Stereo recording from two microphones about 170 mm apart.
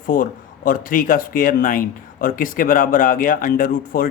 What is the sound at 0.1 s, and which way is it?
Speech, 55° left (ahead or behind).